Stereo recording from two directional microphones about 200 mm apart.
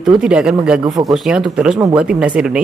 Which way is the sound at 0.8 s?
20° right (ahead or behind).